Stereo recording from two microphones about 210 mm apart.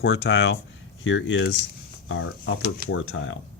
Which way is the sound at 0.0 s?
60° left (ahead or behind).